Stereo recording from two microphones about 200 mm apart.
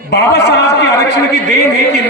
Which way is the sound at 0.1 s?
55° left (ahead or behind).